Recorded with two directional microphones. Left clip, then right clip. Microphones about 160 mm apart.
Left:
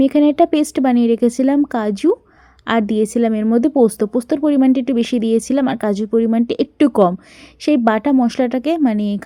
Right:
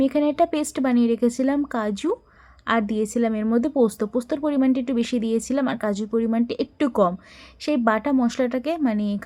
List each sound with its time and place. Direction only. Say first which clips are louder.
0.0 s speech: left 7 dB; 35° left (ahead or behind)